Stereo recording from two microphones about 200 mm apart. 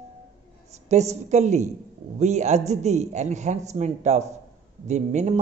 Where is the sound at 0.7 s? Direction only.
35° right (ahead or behind).